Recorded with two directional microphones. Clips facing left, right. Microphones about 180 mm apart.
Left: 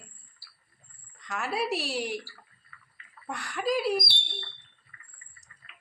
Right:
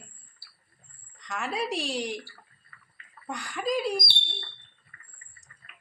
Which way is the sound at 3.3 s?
Centre (ahead or behind).